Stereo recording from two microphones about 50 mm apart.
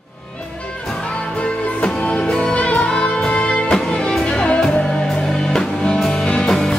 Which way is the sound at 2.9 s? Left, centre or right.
Centre.